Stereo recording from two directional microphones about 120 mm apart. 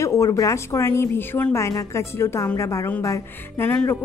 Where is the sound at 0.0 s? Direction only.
25° left (ahead or behind).